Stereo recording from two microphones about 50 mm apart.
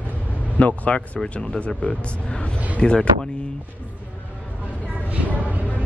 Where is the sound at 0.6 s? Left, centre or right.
Left.